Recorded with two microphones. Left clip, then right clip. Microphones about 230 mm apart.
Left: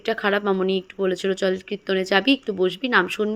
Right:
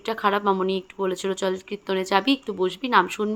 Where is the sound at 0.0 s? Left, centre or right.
Centre.